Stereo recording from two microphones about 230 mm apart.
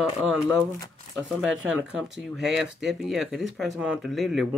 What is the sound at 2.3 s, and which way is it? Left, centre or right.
Speech, centre.